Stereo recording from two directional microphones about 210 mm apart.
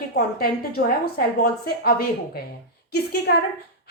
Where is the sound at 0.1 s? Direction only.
45° left (ahead or behind).